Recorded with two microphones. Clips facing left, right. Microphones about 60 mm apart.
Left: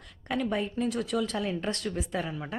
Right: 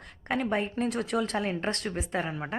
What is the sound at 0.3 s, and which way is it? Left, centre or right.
A woman's voice, right.